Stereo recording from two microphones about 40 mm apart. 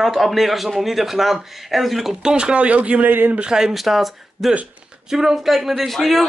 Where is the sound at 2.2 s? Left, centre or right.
Right.